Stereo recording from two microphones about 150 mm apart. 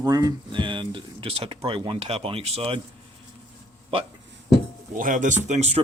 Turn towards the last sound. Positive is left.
turn(degrees=-50)  # may be behind; listen again after turning